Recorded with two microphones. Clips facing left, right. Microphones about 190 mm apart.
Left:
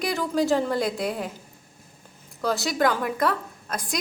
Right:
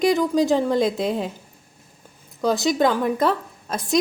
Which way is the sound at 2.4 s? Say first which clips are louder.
Right 4 dB; 20° right (ahead or behind).